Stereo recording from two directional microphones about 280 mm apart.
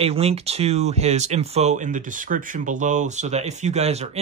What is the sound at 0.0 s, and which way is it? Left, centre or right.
Speech, right.